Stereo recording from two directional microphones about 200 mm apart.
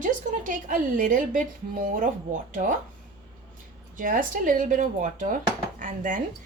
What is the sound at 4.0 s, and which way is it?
A woman's voice, 40° right (ahead or behind).